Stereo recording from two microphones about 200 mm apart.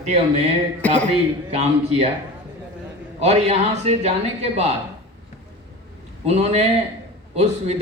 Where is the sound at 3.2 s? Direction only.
30° right (ahead or behind).